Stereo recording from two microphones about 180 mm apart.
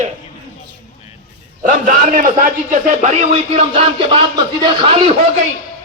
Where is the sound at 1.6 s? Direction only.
45° right (ahead or behind); by 5.1 s 30° right (ahead or behind).